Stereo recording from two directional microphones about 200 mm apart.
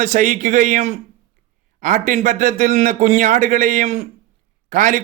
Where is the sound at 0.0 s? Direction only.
40° right (ahead or behind).